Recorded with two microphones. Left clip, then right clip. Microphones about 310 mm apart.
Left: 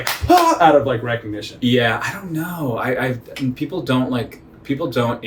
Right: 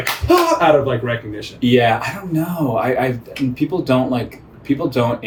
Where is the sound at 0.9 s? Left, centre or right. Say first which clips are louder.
Even; centre.